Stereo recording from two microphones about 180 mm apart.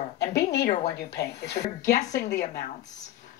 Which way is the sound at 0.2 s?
65° left (ahead or behind).